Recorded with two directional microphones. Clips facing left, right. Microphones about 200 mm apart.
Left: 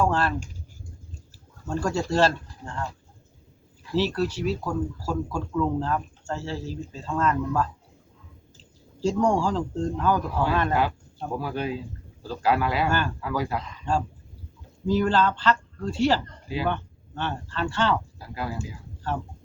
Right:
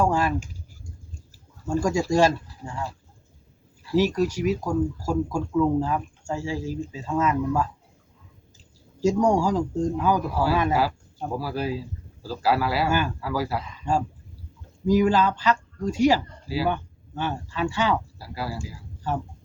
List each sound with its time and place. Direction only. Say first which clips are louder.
0.0 s typing: right 2 dB; 10° right (ahead or behind)
1.6 s speech: right 3 dB; 10° right (ahead or behind)